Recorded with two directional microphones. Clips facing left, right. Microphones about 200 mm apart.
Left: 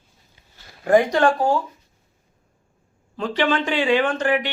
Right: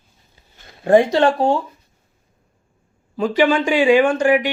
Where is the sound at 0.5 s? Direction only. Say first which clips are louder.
Right 3 dB; 25° right (ahead or behind).